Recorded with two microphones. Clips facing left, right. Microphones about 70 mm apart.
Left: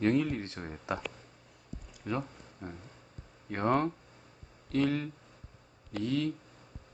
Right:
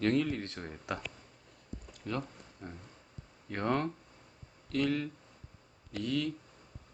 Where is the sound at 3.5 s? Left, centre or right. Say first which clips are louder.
Left 3 dB; left.